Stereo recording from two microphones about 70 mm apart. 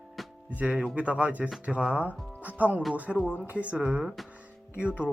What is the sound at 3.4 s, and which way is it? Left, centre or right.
Speech, right.